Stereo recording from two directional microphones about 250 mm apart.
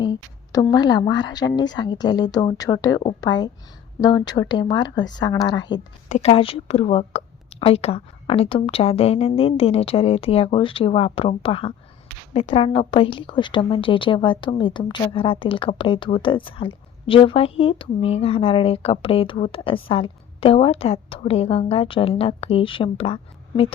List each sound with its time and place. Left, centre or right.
0.0 s a woman's voice: centre